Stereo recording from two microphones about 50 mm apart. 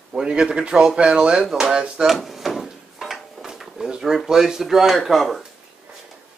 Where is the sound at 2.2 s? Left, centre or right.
Centre.